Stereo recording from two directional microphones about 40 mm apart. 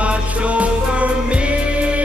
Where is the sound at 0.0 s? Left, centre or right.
Right.